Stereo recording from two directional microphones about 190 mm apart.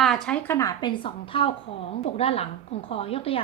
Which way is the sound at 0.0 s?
5° left (ahead or behind).